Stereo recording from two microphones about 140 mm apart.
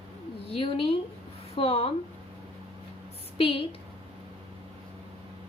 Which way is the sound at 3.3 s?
40° left (ahead or behind).